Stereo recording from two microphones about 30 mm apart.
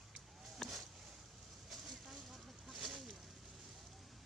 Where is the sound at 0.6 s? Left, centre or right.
Left.